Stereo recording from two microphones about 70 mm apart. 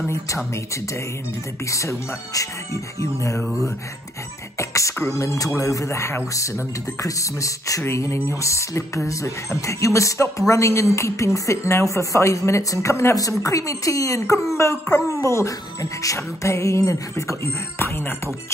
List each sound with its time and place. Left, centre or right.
1.7 s speech: left
4.6 s beatboxing: left
5.1 s speech: left
7.8 s speech: left